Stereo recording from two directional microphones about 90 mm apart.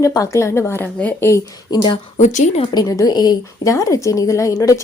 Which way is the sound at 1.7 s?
60° left (ahead or behind).